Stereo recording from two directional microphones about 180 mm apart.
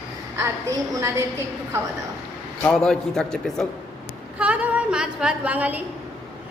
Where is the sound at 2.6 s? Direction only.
5° left (ahead or behind).